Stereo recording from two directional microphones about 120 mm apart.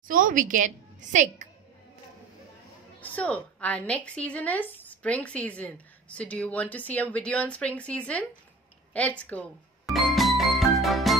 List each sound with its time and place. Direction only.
0.3 s a woman's voice: 90° right
3.0 s speech: 10° left (ahead or behind)
9.8 s music: centre (ahead or behind)